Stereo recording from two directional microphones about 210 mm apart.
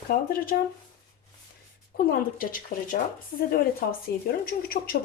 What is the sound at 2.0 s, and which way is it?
Speech, 45° left (ahead or behind).